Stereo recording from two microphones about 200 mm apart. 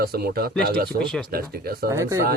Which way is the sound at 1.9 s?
15° right (ahead or behind).